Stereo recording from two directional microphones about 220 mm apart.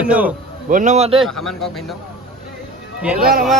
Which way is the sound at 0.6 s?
35° right (ahead or behind).